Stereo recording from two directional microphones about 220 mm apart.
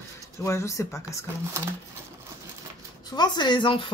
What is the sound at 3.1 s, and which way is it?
Speech, 20° left (ahead or behind).